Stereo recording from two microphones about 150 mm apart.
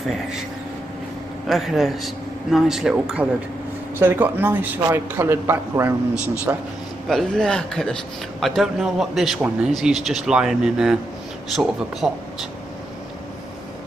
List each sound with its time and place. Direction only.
1.5 s a man's voice: centre (ahead or behind)
4.0 s a man's voice: 15° right (ahead or behind)
7.1 s a man's voice: 5° left (ahead or behind)